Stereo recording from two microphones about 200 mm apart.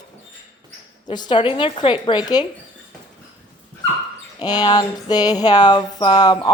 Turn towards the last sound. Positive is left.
turn(degrees=20)  # may be behind; listen again after turning